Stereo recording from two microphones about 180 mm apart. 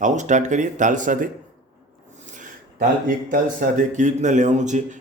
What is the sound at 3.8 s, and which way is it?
Speech, 45° right (ahead or behind).